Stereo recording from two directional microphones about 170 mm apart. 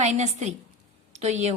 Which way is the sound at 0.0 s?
40° right (ahead or behind).